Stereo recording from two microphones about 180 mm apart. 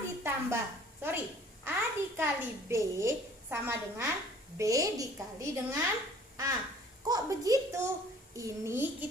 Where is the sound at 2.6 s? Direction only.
15° right (ahead or behind).